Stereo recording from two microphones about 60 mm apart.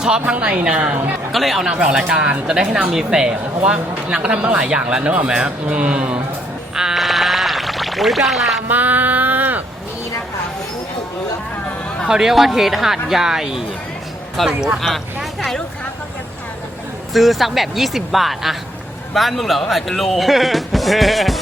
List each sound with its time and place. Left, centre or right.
0.0 s speech: centre
1.3 s speech: centre
1.7 s speech: centre
6.7 s bleat: centre
8.7 s a sound: right
12.0 s speech: centre
14.4 s speech: centre
17.2 s speech: centre